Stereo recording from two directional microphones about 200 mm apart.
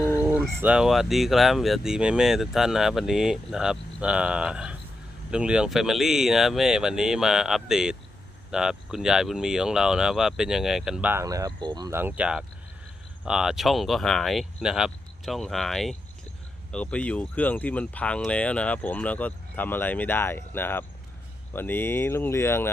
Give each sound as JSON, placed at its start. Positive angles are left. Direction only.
{"t": 0.2, "sound": "speech", "side_deg": -10}